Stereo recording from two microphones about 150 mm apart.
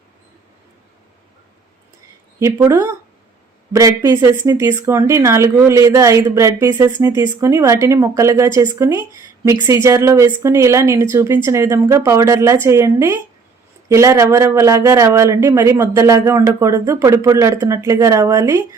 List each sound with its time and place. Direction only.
2.4 s speech: 20° right (ahead or behind)